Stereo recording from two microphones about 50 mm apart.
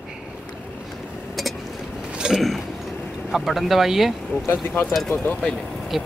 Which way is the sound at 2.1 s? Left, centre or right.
Centre.